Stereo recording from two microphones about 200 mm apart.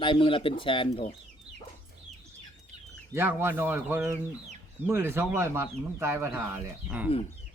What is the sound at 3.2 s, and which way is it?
Speech, 10° right (ahead or behind).